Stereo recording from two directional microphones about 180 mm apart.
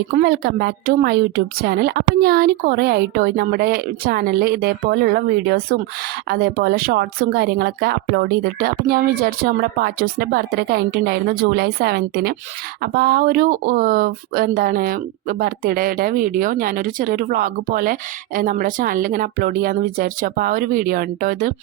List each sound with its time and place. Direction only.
0.2 s speech: 60° right (ahead or behind)